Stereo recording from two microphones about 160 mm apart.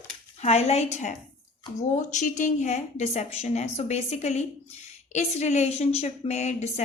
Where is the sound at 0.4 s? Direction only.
40° left (ahead or behind).